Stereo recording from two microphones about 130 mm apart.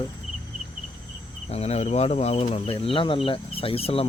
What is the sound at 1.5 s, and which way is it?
Speech, 55° left (ahead or behind).